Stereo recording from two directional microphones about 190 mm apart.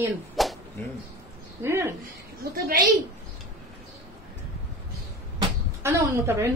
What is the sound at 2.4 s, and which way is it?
Speech, 50° right (ahead or behind).